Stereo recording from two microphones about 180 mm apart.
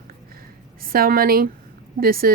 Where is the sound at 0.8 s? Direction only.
55° right (ahead or behind).